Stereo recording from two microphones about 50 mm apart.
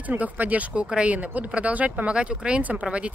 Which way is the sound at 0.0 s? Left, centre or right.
Right.